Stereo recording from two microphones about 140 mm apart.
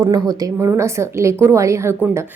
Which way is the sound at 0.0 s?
25° right (ahead or behind).